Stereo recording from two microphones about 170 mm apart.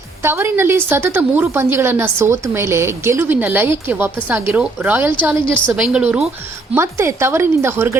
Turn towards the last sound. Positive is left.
turn(degrees=-15)  # may be behind; listen again after turning